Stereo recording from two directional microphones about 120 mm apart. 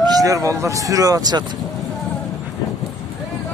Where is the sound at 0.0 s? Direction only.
30° right (ahead or behind).